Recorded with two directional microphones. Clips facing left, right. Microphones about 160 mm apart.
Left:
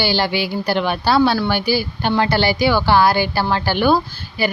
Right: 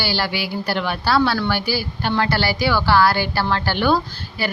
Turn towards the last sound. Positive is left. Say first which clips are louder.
# left 4 dB
turn(degrees=10)  # may be behind; listen again after turning